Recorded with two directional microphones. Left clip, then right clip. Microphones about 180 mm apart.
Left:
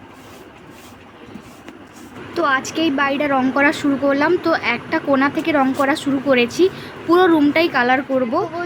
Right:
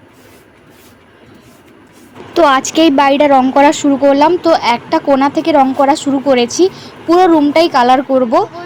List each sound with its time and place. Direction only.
2.3 s a woman's voice: 30° right (ahead or behind); by 7.5 s 5° right (ahead or behind)
7.5 s a woman's voice: 15° right (ahead or behind)